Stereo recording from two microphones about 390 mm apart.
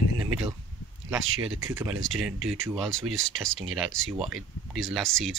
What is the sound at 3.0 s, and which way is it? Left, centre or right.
Speech, right.